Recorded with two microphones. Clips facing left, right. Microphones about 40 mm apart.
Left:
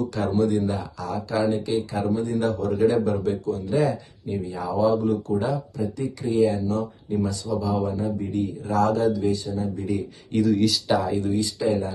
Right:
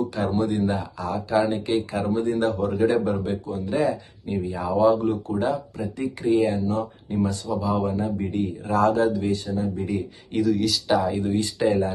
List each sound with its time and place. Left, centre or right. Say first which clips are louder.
0.1 s speech: left 1 dB; right
0.5 s speech: even; right
10.3 s speech: left 1 dB; centre
11.3 s speech: right 2 dB; right